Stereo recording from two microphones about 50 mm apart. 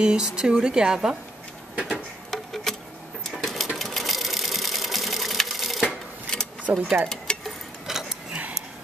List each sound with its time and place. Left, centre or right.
0.0 s speech: centre
2.3 s insect: centre
3.3 s sewing machine: centre
6.7 s speech: right
7.3 s tick-tock: left
7.9 s clock: centre
8.3 s tick-tock: right